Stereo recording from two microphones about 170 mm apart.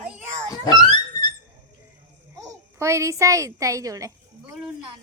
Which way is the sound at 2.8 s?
15° right (ahead or behind).